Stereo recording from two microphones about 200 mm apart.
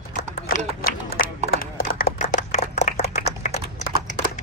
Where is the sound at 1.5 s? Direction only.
45° left (ahead or behind).